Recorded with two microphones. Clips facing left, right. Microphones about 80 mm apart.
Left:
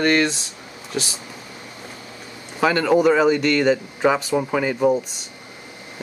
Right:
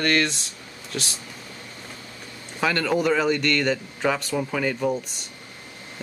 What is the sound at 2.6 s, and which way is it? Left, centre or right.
Speech, centre.